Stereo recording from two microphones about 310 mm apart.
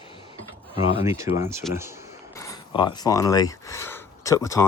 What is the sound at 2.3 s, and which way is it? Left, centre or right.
Speech, centre.